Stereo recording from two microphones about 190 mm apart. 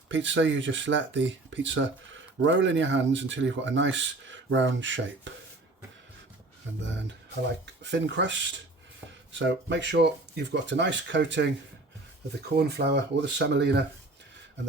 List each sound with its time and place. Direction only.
0.1 s speech: 80° right
7.6 s speech: 65° right (ahead or behind)
12.5 s speech: 60° right (ahead or behind)